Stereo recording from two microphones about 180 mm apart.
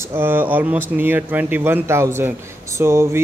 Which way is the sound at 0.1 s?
10° right (ahead or behind).